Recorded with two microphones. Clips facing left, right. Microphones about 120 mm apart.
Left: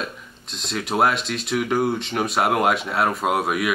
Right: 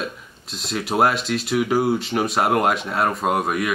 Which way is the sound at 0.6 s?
Centre (ahead or behind).